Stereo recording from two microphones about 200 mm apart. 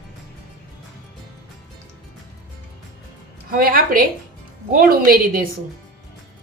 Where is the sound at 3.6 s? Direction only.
45° right (ahead or behind).